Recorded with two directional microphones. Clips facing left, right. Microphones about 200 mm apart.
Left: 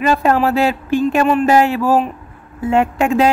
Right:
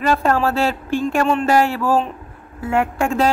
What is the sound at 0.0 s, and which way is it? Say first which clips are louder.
Speech: left 3 dB; 15° left (ahead or behind).